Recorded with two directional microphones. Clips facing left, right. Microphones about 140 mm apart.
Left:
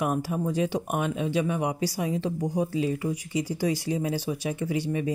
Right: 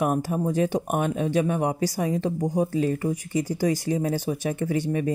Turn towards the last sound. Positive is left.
turn(degrees=-50)  # may be behind; listen again after turning